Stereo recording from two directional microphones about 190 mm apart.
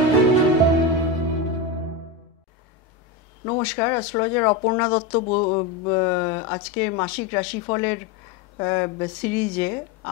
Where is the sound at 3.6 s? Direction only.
10° left (ahead or behind).